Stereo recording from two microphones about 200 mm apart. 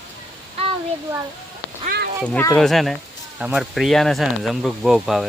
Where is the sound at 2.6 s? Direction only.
Centre (ahead or behind).